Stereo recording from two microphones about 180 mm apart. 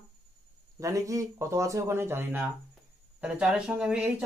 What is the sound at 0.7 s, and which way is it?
Speech, 15° right (ahead or behind).